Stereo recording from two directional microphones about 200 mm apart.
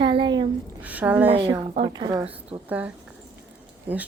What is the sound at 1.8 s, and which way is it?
Speech, 20° right (ahead or behind).